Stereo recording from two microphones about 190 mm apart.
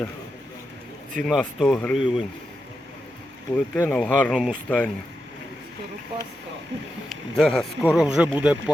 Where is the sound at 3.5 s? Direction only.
5° left (ahead or behind).